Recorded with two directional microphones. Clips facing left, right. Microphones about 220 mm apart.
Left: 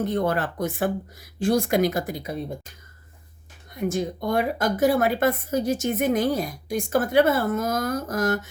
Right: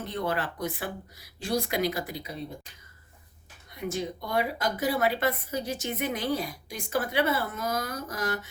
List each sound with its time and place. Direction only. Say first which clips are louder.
0.0 s speech: left 7 dB; 45° left (ahead or behind)
3.8 s speech: left 6 dB; 45° left (ahead or behind)